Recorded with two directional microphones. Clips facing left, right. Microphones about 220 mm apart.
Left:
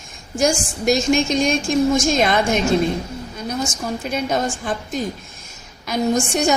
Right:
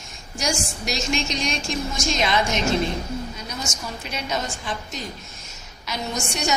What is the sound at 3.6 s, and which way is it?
A woman's voice, 50° left (ahead or behind).